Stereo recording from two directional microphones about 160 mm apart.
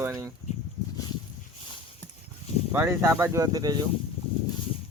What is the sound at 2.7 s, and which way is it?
Speech, 15° right (ahead or behind).